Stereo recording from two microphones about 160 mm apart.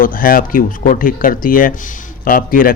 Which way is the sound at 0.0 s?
65° left (ahead or behind).